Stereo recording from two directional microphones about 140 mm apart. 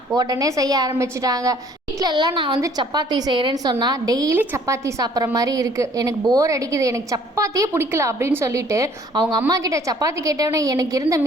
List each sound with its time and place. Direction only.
0.1 s a woman's voice: 25° right (ahead or behind)